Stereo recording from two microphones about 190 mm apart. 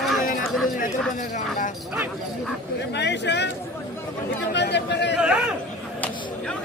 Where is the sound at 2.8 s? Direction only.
65° left (ahead or behind).